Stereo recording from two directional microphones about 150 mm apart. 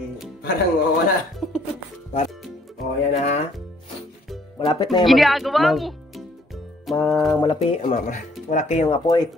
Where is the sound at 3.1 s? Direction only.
45° left (ahead or behind).